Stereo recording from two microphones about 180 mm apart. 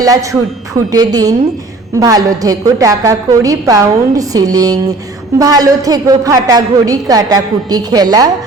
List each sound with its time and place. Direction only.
0.0 s a woman's voice: 20° right (ahead or behind)